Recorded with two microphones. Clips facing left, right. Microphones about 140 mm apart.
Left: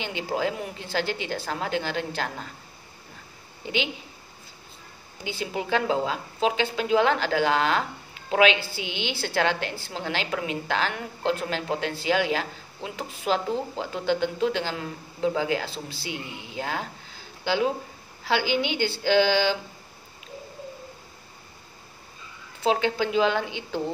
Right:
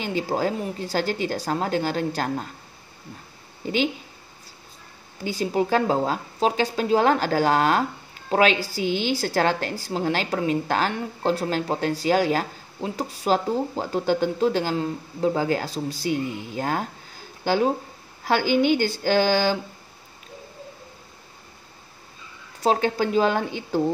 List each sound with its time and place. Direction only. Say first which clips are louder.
0.0 s a woman's voice: right 3 dB; 40° right (ahead or behind)
3.6 s a woman's voice: right 4 dB; 40° right (ahead or behind)
5.2 s a woman's voice: right 7 dB; 40° right (ahead or behind)
22.6 s speech: right 2 dB; 40° right (ahead or behind)